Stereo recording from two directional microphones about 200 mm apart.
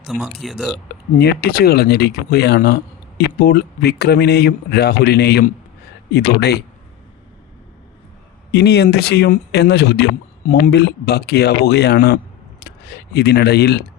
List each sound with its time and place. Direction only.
0.1 s a man's voice: 5° right (ahead or behind)
1.2 s speech: 50° left (ahead or behind)
8.5 s speech: 55° left (ahead or behind)